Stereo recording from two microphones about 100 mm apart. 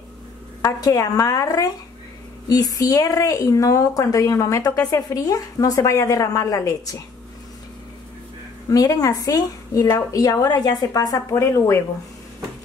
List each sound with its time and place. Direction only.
0.6 s speech: 35° left (ahead or behind)
8.6 s speech: 35° left (ahead or behind)